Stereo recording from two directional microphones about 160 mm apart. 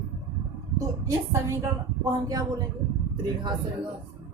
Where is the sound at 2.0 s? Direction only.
25° right (ahead or behind).